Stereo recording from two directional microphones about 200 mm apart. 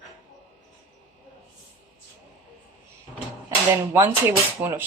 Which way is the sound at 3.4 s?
15° right (ahead or behind).